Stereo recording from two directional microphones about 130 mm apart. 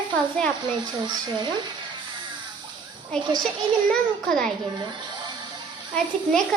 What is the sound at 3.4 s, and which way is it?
A child's voice, 5° left (ahead or behind).